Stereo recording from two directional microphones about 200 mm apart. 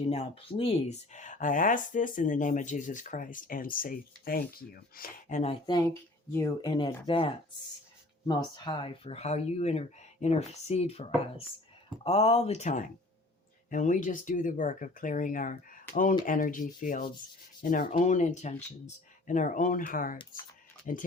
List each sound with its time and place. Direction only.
0.1 s speech: 30° left (ahead or behind); by 5.4 s 45° left (ahead or behind)
5.4 s speech: 25° left (ahead or behind)